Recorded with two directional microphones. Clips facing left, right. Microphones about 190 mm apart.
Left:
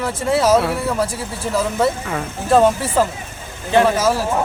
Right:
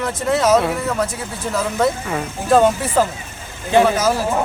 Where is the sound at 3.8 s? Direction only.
5° left (ahead or behind).